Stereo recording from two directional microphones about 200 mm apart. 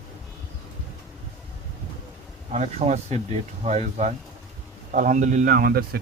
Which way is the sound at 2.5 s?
35° right (ahead or behind).